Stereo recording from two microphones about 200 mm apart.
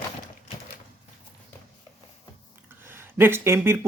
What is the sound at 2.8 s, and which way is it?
Speech, 10° right (ahead or behind).